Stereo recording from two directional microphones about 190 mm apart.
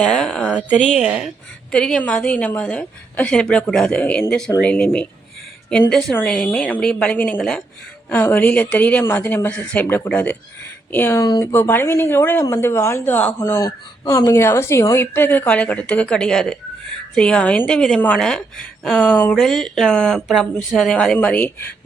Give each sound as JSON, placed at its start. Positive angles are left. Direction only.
{"t": 0.0, "sound": "a woman's voice", "side_deg": 5}